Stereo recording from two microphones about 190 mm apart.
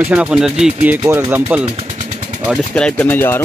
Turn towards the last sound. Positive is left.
turn(degrees=10)  # may be behind; listen again after turning